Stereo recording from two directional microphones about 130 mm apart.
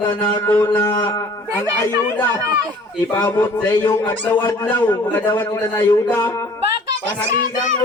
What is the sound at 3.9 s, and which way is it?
Speech, 30° left (ahead or behind).